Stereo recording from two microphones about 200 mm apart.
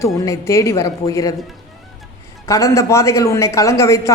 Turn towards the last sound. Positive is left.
turn(degrees=15)  # may be behind; listen again after turning